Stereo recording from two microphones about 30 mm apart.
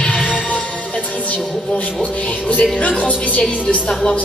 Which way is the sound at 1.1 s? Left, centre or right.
Left.